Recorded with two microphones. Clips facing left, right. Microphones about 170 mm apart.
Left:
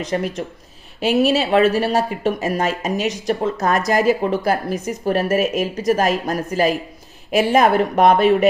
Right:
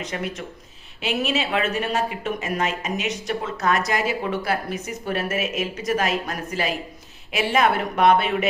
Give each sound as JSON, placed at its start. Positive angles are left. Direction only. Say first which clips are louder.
{"t": 0.0, "sound": "speech", "louder": "left 7 dB", "side_deg": 35}